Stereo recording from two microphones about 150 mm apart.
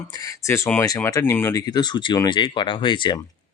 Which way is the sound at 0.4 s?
20° left (ahead or behind).